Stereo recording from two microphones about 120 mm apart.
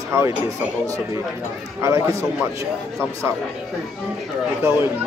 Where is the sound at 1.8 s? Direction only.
25° right (ahead or behind).